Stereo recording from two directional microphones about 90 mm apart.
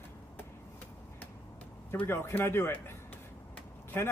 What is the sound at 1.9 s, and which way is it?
Speech, 25° left (ahead or behind).